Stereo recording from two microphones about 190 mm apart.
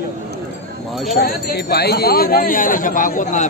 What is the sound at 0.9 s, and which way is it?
Speech, centre (ahead or behind).